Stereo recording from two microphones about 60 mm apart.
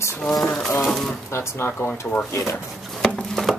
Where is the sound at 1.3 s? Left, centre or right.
Left.